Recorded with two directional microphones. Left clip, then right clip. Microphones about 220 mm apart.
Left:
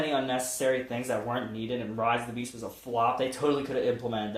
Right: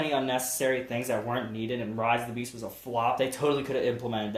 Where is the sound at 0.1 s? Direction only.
30° right (ahead or behind).